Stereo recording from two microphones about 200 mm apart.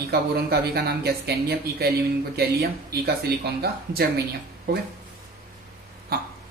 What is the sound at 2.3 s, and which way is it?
Speech, 50° right (ahead or behind).